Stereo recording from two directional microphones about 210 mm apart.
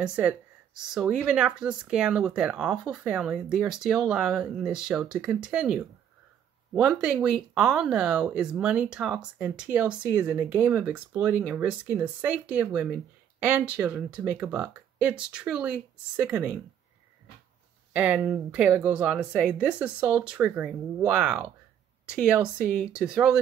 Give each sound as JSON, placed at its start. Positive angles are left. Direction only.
{"t": 0.0, "sound": "speech", "side_deg": -5}
{"t": 17.9, "sound": "speech", "side_deg": -5}